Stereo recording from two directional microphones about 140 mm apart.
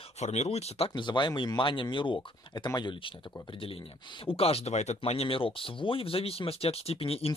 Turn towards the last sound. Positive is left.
turn(degrees=45)  # may be behind; listen again after turning